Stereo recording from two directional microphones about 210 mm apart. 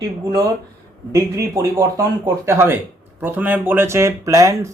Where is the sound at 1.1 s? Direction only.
15° right (ahead or behind).